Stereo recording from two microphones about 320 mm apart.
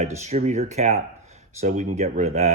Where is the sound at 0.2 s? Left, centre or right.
Right.